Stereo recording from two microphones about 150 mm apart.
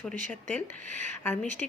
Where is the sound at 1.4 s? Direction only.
55° right (ahead or behind).